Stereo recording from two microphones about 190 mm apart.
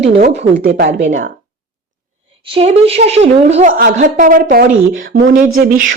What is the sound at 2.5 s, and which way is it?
A woman's voice, 30° right (ahead or behind).